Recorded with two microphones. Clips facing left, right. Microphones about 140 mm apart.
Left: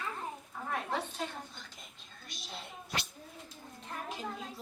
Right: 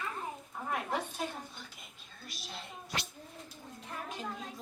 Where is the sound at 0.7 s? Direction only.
10° right (ahead or behind).